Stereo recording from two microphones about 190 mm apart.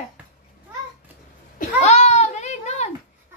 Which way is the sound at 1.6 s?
35° left (ahead or behind).